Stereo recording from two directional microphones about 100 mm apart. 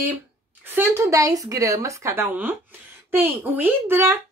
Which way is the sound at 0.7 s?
25° right (ahead or behind).